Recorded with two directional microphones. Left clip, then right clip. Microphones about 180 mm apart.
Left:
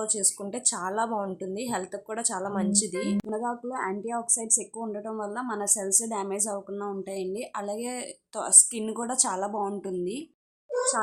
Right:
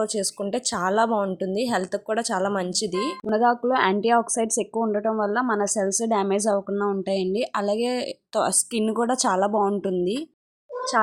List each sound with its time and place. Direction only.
0.0 s speech: 30° right (ahead or behind)